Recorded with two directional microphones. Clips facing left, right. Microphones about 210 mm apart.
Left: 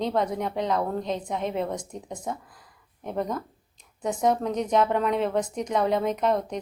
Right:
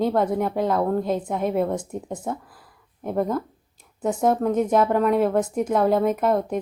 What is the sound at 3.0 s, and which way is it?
Speech, 5° right (ahead or behind).